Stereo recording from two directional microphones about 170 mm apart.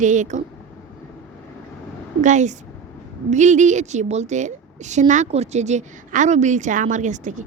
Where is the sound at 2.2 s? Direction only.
45° right (ahead or behind).